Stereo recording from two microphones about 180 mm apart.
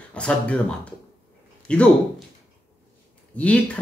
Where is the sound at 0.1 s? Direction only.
5° left (ahead or behind).